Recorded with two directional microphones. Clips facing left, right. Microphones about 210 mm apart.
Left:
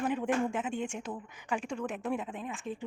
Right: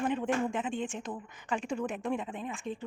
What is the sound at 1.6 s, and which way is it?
Speech, 5° right (ahead or behind).